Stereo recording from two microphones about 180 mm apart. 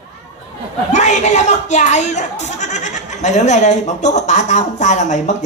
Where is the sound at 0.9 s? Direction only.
40° left (ahead or behind).